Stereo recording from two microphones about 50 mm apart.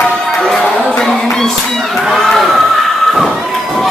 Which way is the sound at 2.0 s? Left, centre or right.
Centre.